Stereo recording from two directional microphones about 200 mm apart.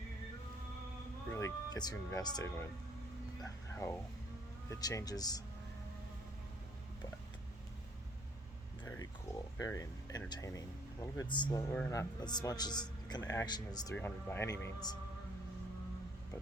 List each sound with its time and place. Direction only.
1.3 s speech: 15° left (ahead or behind)
3.4 s a sound: 15° left (ahead or behind)
4.8 s a man's voice: 20° left (ahead or behind)
9.6 s a man's voice: 15° left (ahead or behind)